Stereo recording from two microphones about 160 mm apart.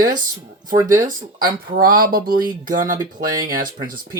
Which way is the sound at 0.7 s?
20° right (ahead or behind).